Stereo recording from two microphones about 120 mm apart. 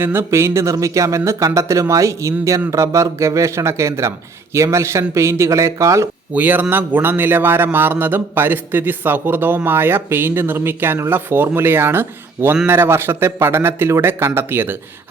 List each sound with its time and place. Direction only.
0.0 s speech: 20° right (ahead or behind)
6.3 s a man's voice: 15° right (ahead or behind)